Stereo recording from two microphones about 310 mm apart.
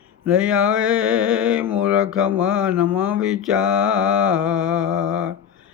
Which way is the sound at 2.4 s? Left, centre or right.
Right.